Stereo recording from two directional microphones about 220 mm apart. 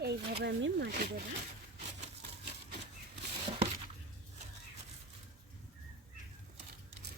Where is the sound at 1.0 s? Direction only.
40° right (ahead or behind).